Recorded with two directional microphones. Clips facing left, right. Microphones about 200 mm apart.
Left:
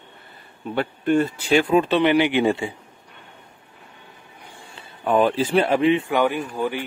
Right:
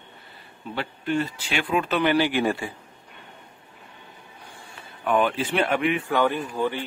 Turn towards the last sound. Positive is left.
turn(degrees=10)  # may be behind; listen again after turning